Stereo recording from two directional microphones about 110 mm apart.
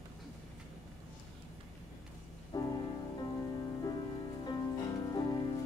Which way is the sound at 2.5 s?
35° left (ahead or behind).